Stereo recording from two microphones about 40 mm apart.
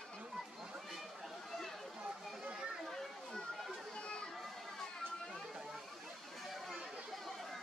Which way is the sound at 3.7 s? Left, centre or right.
Left.